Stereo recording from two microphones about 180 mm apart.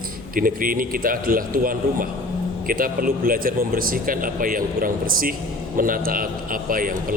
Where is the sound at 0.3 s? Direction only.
50° right (ahead or behind).